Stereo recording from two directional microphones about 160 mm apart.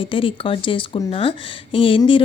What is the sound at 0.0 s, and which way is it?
A woman's voice, 35° left (ahead or behind).